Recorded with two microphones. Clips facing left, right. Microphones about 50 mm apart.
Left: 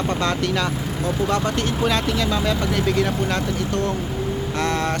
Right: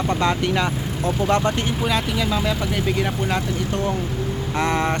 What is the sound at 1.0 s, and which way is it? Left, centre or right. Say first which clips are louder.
Speech: right 2 dB; right.